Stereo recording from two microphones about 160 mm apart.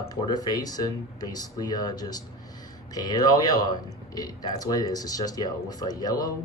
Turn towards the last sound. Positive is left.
turn(degrees=25)  # may be behind; listen again after turning